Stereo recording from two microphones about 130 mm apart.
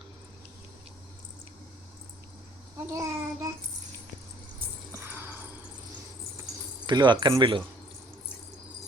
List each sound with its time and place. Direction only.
2.9 s child singing: 25° right (ahead or behind)
4.9 s a sound: 15° right (ahead or behind)
6.8 s speech: 35° right (ahead or behind)